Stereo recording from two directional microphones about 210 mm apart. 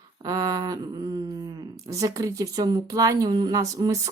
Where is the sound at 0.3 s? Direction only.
15° right (ahead or behind).